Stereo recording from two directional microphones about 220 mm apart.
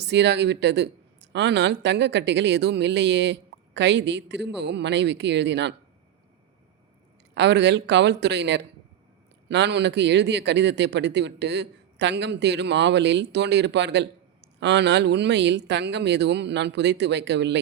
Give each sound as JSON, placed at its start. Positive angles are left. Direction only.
{"t": 0.0, "sound": "a man's voice", "side_deg": -50}
{"t": 7.3, "sound": "a man's voice", "side_deg": -50}